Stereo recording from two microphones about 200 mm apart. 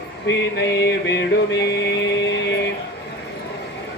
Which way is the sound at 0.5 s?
55° left (ahead or behind).